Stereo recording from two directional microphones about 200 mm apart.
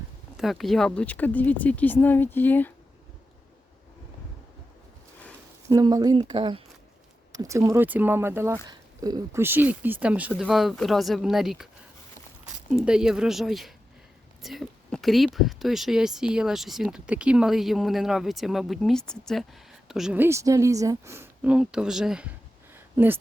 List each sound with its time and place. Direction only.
0.3 s speech: centre (ahead or behind)
5.6 s speech: 20° right (ahead or behind)
7.3 s speech: 15° right (ahead or behind)
12.7 s speech: 5° right (ahead or behind)
22.7 s a sound: 10° right (ahead or behind)